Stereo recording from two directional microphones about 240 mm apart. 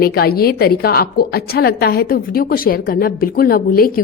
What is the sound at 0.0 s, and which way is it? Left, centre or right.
A woman's voice, left.